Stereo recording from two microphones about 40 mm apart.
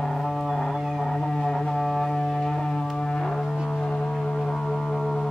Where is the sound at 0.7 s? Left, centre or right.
Centre.